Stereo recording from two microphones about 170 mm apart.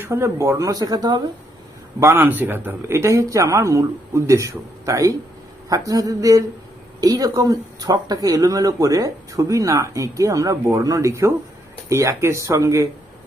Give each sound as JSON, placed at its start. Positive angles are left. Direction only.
{"t": 0.0, "sound": "speech", "side_deg": -15}